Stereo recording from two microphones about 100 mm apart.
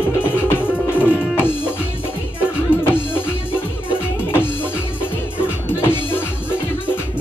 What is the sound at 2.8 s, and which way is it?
Music, 20° left (ahead or behind).